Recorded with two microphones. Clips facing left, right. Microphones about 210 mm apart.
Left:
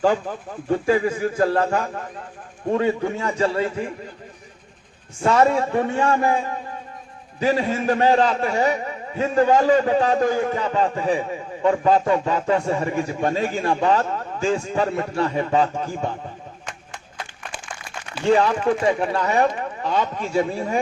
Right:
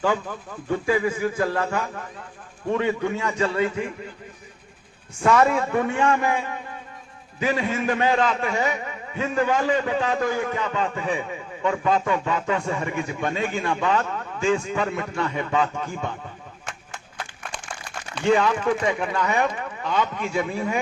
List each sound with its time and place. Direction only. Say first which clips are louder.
0.0 s a man's voice: left 4 dB; 40° left (ahead or behind)
5.2 s a man's voice: left 1 dB; 30° left (ahead or behind)
18.3 s a man's voice: left 2 dB; 35° left (ahead or behind)